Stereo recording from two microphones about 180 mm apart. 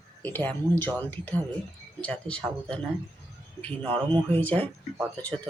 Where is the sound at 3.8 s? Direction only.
25° right (ahead or behind).